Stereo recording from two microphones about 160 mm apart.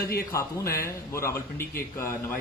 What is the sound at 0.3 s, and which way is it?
A man's voice, 20° left (ahead or behind).